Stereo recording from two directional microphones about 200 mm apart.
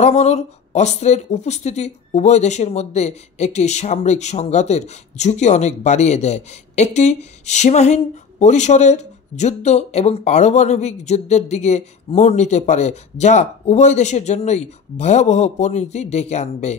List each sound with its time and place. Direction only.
0.0 s speech: 35° left (ahead or behind)